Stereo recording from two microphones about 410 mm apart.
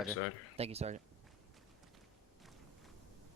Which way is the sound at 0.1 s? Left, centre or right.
Left.